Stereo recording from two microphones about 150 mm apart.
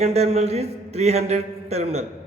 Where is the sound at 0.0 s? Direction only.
45° right (ahead or behind).